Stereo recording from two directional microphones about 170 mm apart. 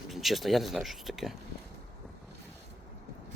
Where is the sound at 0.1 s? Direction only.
Centre (ahead or behind).